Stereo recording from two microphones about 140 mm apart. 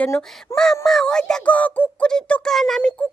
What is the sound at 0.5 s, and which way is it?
Speech, 5° left (ahead or behind).